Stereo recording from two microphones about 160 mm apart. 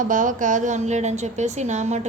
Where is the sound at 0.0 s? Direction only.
55° right (ahead or behind).